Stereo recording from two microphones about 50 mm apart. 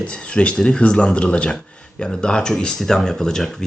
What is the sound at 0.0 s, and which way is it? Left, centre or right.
Speech, left.